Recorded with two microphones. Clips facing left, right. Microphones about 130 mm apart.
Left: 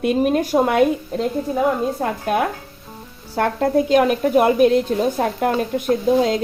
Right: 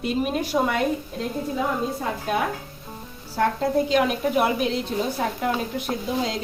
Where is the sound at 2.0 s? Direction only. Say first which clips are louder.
Left 5 dB; 55° left (ahead or behind).